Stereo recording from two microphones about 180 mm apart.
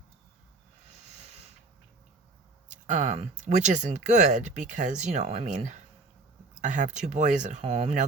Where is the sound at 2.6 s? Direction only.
45° right (ahead or behind).